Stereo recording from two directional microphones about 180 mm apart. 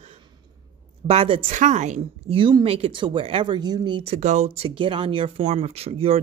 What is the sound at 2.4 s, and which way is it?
Speech, 25° right (ahead or behind).